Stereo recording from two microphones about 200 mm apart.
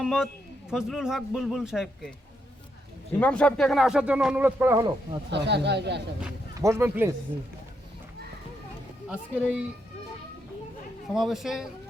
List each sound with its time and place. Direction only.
0.0 s speech: centre (ahead or behind)
3.2 s speech: 5° left (ahead or behind); by 5.2 s 15° right (ahead or behind)
5.3 s speech: 60° right (ahead or behind)
6.6 s a man's voice: 15° right (ahead or behind)
9.0 s speech: 5° right (ahead or behind)
11.1 s speech: centre (ahead or behind)